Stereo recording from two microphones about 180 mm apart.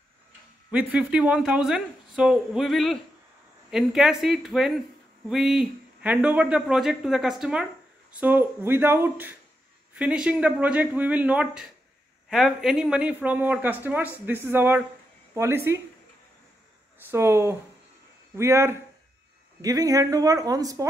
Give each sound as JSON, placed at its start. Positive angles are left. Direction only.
{"t": 0.7, "sound": "speech", "side_deg": -10}
{"t": 17.1, "sound": "speech", "side_deg": -15}